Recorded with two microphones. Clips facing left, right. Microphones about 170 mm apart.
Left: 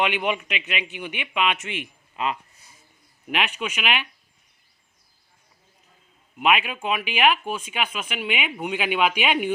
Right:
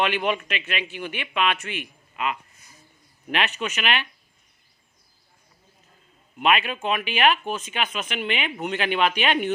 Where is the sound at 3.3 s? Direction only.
10° left (ahead or behind).